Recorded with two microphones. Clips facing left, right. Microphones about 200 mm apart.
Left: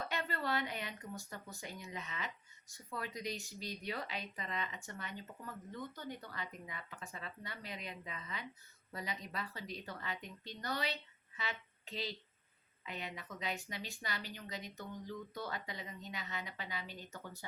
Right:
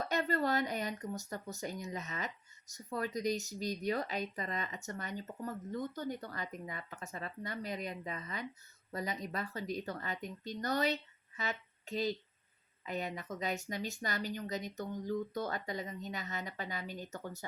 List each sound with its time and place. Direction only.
0.0 s speech: 40° right (ahead or behind)